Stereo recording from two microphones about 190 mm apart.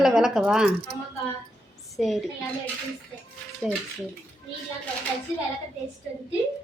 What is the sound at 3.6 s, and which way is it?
Speech, 5° left (ahead or behind).